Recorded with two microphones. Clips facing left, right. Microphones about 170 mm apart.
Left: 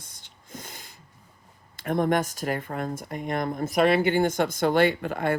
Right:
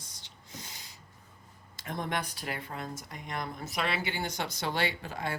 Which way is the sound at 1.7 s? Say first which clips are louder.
Left 11 dB; 55° left (ahead or behind).